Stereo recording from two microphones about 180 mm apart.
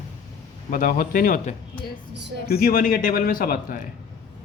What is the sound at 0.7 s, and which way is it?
Speech, 50° left (ahead or behind).